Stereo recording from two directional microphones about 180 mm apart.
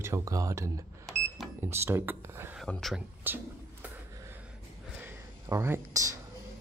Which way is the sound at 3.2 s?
10° right (ahead or behind).